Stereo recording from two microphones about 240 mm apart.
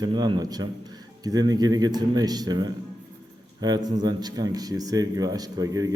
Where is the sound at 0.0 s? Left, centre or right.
Centre.